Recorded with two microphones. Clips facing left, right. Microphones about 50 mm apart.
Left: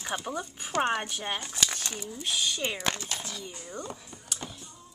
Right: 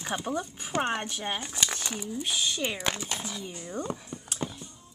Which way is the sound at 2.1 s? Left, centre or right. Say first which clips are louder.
Even; centre.